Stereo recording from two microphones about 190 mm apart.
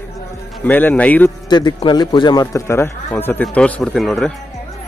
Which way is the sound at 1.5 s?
25° left (ahead or behind).